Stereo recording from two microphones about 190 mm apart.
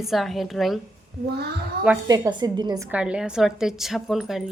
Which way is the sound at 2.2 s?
25° right (ahead or behind).